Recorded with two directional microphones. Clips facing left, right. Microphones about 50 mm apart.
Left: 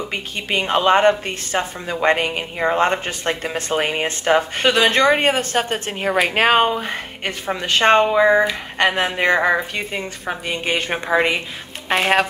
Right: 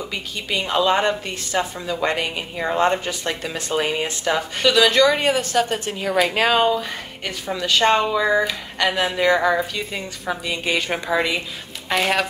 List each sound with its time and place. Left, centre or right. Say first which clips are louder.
0.1 s a woman's voice: left 2 dB; left